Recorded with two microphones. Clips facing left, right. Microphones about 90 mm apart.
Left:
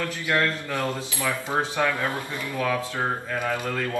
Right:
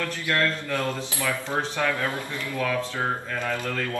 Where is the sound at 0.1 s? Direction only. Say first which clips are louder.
Left 1 dB; 15° left (ahead or behind).